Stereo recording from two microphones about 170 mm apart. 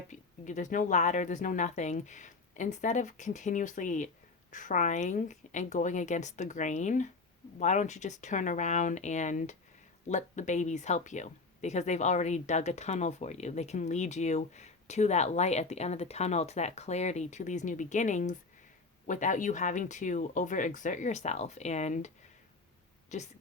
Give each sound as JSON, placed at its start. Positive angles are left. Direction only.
{"t": 0.1, "sound": "speech", "side_deg": 45}
{"t": 23.1, "sound": "speech", "side_deg": 45}